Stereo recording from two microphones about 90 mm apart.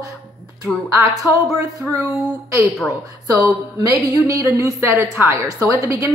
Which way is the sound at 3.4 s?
35° right (ahead or behind).